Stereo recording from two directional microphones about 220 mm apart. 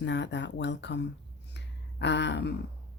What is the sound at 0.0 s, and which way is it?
Speech, 50° left (ahead or behind).